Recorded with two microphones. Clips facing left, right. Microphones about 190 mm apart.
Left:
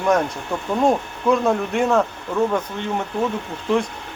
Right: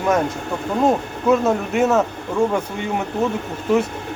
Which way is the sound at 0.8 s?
5° right (ahead or behind).